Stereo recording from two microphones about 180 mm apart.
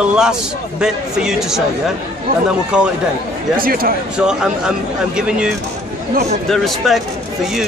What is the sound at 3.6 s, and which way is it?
Speech, 55° right (ahead or behind).